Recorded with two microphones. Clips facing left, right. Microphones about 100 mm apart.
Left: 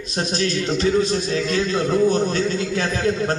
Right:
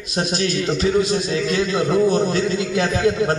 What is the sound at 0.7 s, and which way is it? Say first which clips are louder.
Speech: even; 30° left (ahead or behind).